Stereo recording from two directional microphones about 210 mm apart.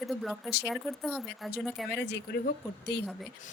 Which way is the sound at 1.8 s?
55° left (ahead or behind).